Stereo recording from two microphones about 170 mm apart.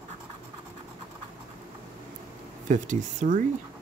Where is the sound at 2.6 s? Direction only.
45° right (ahead or behind).